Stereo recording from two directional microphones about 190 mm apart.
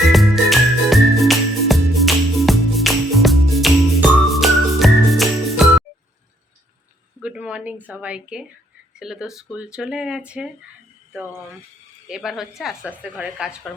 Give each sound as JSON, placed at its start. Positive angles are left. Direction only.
{"t": 0.1, "sound": "music", "side_deg": 0}
{"t": 7.2, "sound": "a woman's voice", "side_deg": -5}
{"t": 12.0, "sound": "speech", "side_deg": 0}